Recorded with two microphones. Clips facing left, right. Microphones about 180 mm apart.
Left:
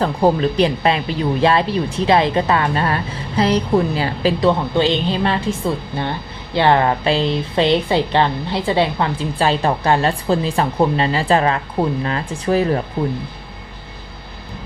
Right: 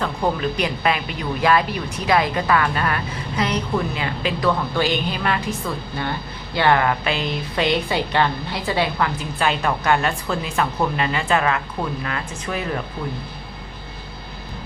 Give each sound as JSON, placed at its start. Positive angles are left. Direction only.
{"t": 0.0, "sound": "speech", "side_deg": 35}